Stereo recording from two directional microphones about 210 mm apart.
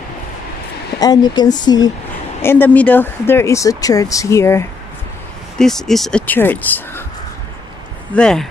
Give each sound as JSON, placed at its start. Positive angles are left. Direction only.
{"t": 0.9, "sound": "speech", "side_deg": 20}
{"t": 5.6, "sound": "speech", "side_deg": 0}
{"t": 8.1, "sound": "speech", "side_deg": 5}